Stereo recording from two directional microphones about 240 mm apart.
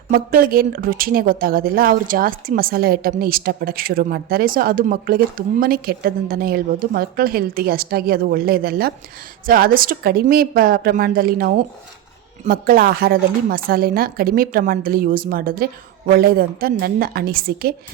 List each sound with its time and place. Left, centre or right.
0.1 s speech: right